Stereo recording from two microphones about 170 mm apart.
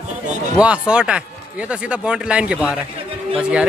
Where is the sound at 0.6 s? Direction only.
5° right (ahead or behind).